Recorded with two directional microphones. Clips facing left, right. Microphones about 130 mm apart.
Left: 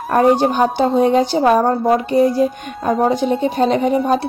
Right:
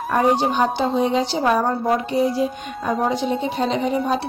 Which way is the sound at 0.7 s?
50° left (ahead or behind).